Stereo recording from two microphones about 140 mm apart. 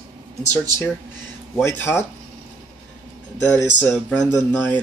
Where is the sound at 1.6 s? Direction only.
15° left (ahead or behind).